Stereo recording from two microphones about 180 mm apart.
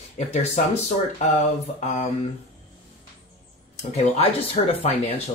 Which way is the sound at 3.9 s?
35° left (ahead or behind).